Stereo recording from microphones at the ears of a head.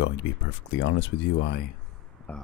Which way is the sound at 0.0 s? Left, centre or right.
Left.